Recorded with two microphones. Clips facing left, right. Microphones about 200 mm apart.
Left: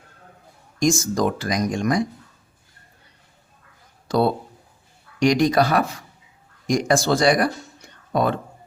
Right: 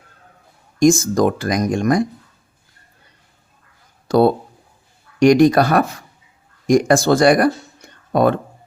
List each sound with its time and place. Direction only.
0.8 s speech: 50° right (ahead or behind)
5.2 s speech: 55° right (ahead or behind)